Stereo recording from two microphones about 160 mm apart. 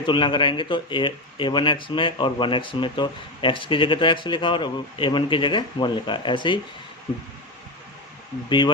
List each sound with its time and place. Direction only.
0.0 s speech: 30° left (ahead or behind)
8.4 s speech: 30° left (ahead or behind)